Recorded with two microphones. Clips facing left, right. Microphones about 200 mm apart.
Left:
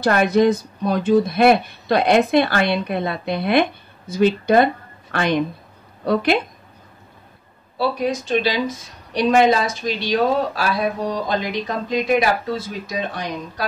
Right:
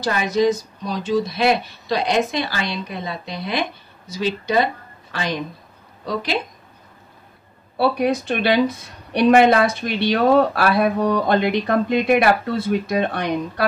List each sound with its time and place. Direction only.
0.0 s speech: 60° left (ahead or behind)
7.7 s speech: 60° right (ahead or behind)